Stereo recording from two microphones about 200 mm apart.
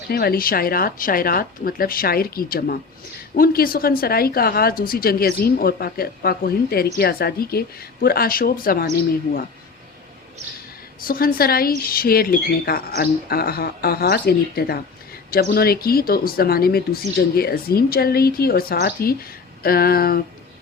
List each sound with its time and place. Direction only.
0.1 s a woman's voice: 50° left (ahead or behind)
11.0 s a woman's voice: 45° left (ahead or behind)